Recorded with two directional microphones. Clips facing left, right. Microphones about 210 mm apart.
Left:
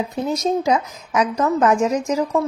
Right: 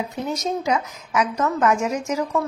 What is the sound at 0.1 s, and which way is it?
Speech, 35° left (ahead or behind).